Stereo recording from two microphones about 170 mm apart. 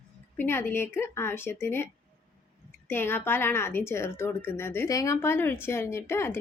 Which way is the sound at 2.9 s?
15° left (ahead or behind).